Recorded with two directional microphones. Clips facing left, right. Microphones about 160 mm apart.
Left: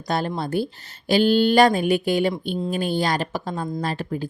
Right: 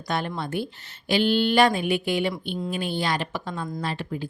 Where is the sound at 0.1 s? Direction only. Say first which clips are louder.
Left 4 dB; 35° left (ahead or behind).